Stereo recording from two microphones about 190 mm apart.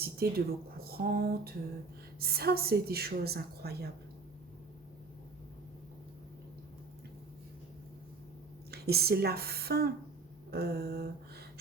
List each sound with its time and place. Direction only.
0.0 s a sound: 55° right (ahead or behind)
2.1 s a woman's voice: 55° right (ahead or behind)
8.7 s a woman's voice: 55° right (ahead or behind)